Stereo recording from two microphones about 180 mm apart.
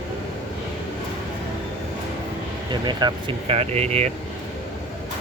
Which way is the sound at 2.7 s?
25° right (ahead or behind).